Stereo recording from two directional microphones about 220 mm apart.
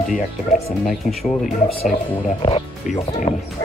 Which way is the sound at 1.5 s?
35° left (ahead or behind).